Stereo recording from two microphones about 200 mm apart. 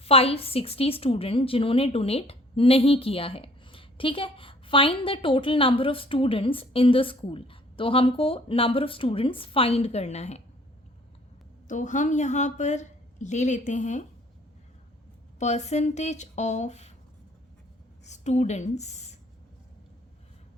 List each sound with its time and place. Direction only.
0.0 s a woman's voice: 30° left (ahead or behind)
11.7 s a woman's voice: 40° left (ahead or behind)
15.4 s a woman's voice: 35° left (ahead or behind)
18.0 s a woman's voice: 35° left (ahead or behind)